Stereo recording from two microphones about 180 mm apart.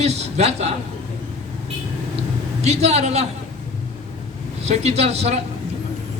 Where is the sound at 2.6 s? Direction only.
35° right (ahead or behind).